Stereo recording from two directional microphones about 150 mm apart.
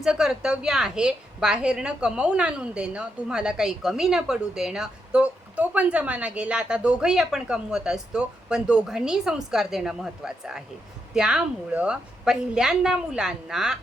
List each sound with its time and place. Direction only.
0.0 s a woman's voice: 5° right (ahead or behind)